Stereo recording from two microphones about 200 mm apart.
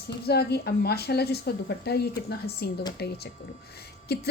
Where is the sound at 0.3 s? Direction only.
50° left (ahead or behind).